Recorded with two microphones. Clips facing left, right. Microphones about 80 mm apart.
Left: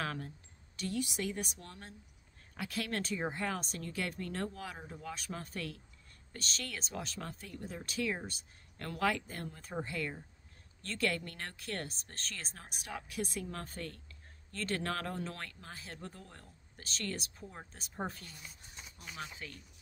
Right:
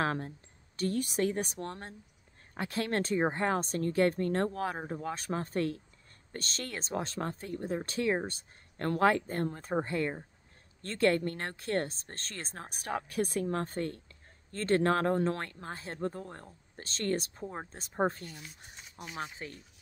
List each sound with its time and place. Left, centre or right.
0.0 s speech: right